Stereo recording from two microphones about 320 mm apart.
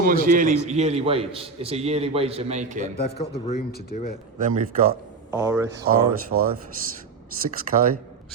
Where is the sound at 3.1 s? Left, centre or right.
Left.